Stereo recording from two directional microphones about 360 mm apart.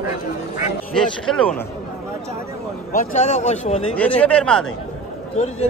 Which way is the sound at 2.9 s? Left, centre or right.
Centre.